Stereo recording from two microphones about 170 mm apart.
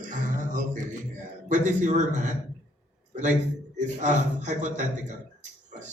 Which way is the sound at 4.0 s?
45° right (ahead or behind).